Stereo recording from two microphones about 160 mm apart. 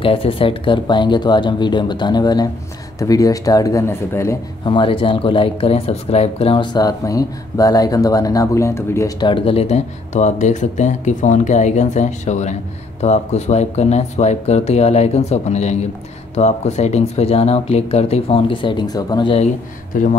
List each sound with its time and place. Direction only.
0.0 s speech: 35° left (ahead or behind); by 4.4 s 15° left (ahead or behind)
4.6 s speech: 30° left (ahead or behind)
9.3 s speech: 35° left (ahead or behind)
19.9 s speech: 55° left (ahead or behind)